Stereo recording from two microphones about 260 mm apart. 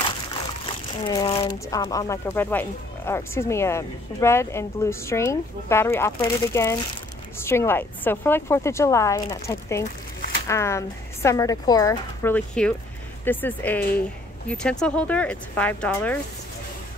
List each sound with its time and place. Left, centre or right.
0.9 s speech: centre